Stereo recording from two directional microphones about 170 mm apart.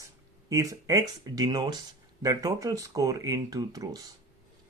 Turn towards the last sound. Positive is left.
turn(degrees=-20)  # may be behind; listen again after turning